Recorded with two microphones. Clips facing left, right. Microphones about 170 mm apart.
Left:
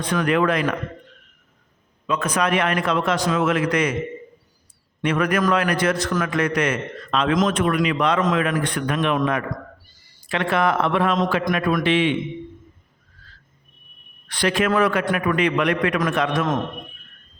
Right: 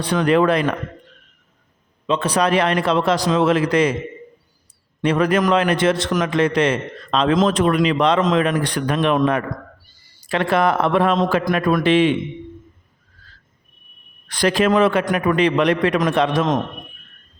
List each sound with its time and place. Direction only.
0.0 s a man's voice: 30° right (ahead or behind)
2.0 s a man's voice: 30° right (ahead or behind)
5.0 s a man's voice: 30° right (ahead or behind)
14.3 s a man's voice: 40° right (ahead or behind)
14.7 s a man's voice: 25° right (ahead or behind)